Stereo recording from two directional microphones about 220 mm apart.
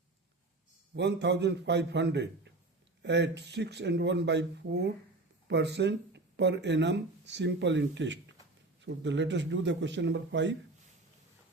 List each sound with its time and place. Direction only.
0.9 s a man's voice: 50° right (ahead or behind)